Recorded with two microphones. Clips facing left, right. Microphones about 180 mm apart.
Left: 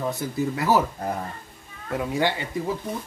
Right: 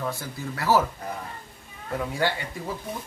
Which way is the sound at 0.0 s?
20° left (ahead or behind).